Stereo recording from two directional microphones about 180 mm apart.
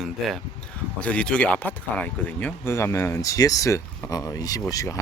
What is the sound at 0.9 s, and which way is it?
Speech, 5° left (ahead or behind).